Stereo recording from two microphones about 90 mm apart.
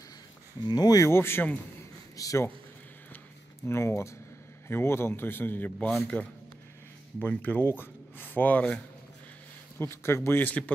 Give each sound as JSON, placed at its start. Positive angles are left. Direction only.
{"t": 0.6, "sound": "speech", "side_deg": 50}
{"t": 1.0, "sound": "speech", "side_deg": 30}
{"t": 1.8, "sound": "a sound", "side_deg": 35}
{"t": 3.6, "sound": "speech", "side_deg": 30}
{"t": 9.8, "sound": "speech", "side_deg": 30}